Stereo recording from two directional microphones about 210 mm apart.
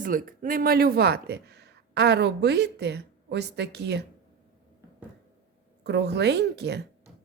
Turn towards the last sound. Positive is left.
turn(degrees=-55)  # may be behind; listen again after turning